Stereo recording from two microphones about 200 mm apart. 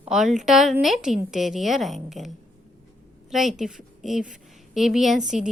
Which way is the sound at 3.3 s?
Centre (ahead or behind).